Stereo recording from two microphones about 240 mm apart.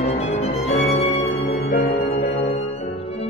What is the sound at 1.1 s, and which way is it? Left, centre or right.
Music, left.